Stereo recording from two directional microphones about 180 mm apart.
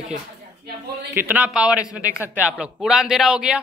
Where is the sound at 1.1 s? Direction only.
10° right (ahead or behind).